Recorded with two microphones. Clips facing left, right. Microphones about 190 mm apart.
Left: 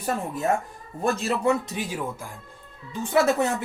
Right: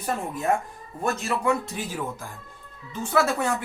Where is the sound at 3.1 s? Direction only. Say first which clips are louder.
Left 2 dB; 20° left (ahead or behind).